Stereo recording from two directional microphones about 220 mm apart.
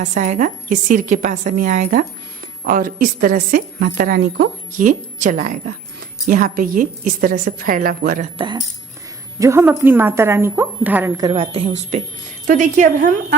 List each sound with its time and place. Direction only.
0.0 s a woman's voice: 35° right (ahead or behind)
8.4 s a woman's voice: 20° right (ahead or behind)
11.2 s a woman's voice: 25° right (ahead or behind)